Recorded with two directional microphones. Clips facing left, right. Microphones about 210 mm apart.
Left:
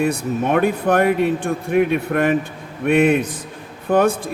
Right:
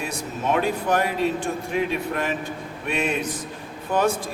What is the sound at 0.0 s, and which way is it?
Speech, 60° left (ahead or behind).